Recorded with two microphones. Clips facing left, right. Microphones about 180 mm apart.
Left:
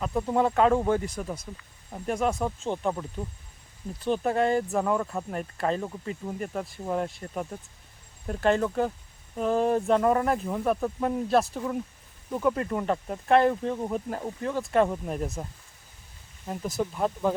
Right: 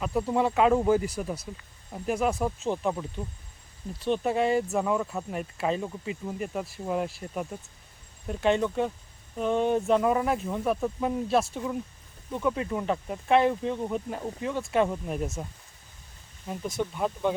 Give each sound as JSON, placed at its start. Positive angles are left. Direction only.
{"t": 0.0, "sound": "speech", "side_deg": -5}
{"t": 4.0, "sound": "speech", "side_deg": 0}
{"t": 16.5, "sound": "speech", "side_deg": 0}